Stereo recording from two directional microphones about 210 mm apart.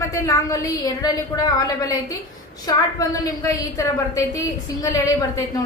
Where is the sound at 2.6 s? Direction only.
15° left (ahead or behind).